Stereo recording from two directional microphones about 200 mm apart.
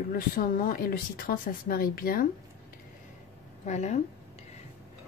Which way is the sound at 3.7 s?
35° left (ahead or behind).